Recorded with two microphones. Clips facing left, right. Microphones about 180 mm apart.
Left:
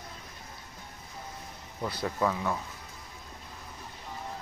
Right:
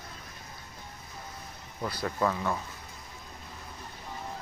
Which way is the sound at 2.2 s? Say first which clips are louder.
Even; 5° left (ahead or behind).